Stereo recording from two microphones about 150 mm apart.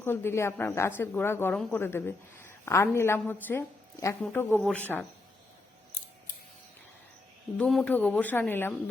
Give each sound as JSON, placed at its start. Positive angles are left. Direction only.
{"t": 0.0, "sound": "a woman's voice", "side_deg": 15}
{"t": 7.6, "sound": "a woman's voice", "side_deg": 5}